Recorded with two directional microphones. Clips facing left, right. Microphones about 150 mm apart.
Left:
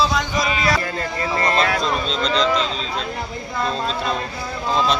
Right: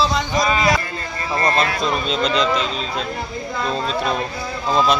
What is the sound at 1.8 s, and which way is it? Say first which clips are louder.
Speech: right 2 dB; 10° right (ahead or behind).